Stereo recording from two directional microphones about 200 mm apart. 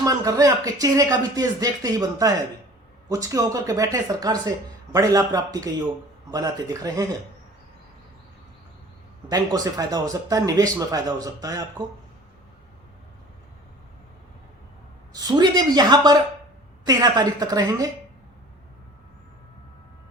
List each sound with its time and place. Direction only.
0.0 s speech: 15° right (ahead or behind)
9.3 s speech: 20° right (ahead or behind)
15.1 s a woman's voice: 20° right (ahead or behind)